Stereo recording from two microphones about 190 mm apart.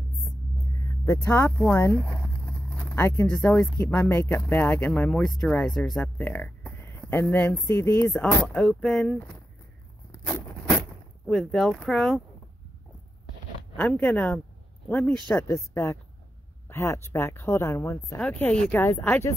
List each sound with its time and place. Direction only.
0.7 s speech: 15° left (ahead or behind)
10.1 s a sound: 15° left (ahead or behind)
11.2 s speech: centre (ahead or behind)
13.7 s speech: 5° left (ahead or behind)